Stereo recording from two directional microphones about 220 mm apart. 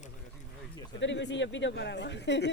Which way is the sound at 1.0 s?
55° left (ahead or behind).